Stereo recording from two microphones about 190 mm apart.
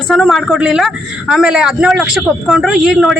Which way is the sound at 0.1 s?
Centre (ahead or behind).